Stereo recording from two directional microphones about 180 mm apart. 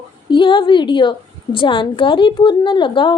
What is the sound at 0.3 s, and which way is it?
A woman's voice, 25° left (ahead or behind).